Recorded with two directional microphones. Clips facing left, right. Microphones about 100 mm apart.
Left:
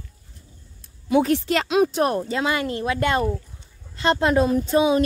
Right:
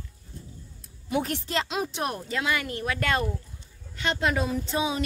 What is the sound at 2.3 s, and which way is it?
Speech, 30° left (ahead or behind).